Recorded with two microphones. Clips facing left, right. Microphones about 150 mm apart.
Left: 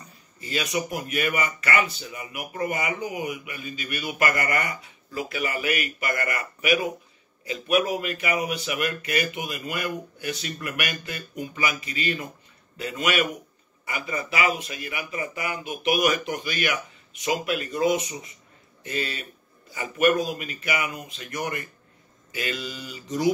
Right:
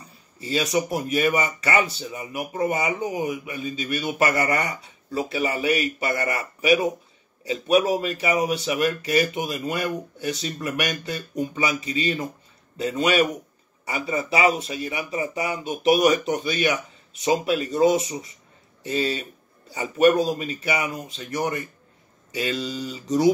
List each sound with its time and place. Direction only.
0.4 s a man's voice: 30° right (ahead or behind)